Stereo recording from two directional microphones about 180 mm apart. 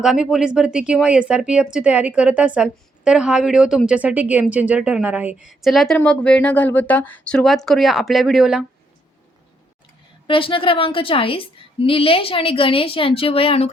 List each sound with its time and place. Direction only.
0.0 s speech: 5° right (ahead or behind)
10.2 s a woman's voice: 30° left (ahead or behind)